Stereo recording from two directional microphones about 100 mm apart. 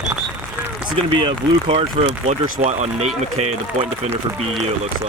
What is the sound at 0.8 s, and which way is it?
Speech, 55° right (ahead or behind).